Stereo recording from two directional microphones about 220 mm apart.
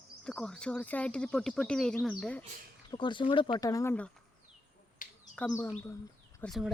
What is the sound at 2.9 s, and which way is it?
Speech, 20° left (ahead or behind).